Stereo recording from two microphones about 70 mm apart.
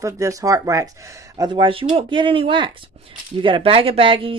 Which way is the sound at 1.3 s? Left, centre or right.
Right.